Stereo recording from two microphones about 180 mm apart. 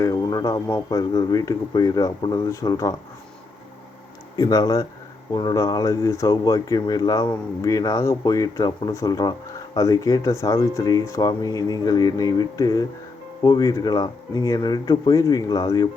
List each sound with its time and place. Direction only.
0.0 s speech: 20° left (ahead or behind)
4.4 s speech: 20° left (ahead or behind)